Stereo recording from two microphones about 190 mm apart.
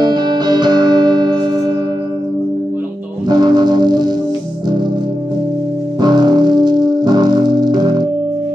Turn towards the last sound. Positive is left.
turn(degrees=-20)  # may be behind; listen again after turning